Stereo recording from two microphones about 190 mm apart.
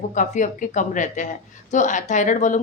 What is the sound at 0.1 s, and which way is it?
A woman's voice, 40° left (ahead or behind).